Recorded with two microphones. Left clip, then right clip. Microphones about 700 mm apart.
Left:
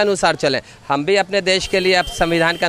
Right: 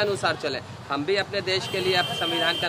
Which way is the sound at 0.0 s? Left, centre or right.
Left.